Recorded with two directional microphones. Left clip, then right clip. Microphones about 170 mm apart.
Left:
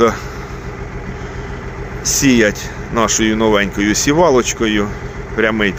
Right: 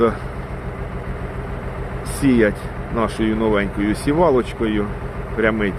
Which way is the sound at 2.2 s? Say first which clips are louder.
Left 3 dB; 10° left (ahead or behind).